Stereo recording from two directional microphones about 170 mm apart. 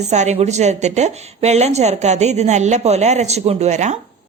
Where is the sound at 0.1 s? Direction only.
45° right (ahead or behind).